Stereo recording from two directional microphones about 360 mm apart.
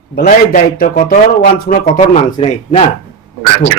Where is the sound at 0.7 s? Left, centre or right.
Left.